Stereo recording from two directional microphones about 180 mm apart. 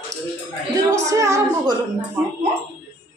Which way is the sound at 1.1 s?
15° right (ahead or behind).